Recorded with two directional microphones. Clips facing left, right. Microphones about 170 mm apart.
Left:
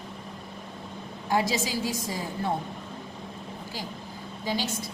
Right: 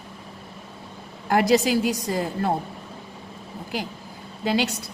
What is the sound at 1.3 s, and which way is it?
A woman's voice, 65° right (ahead or behind).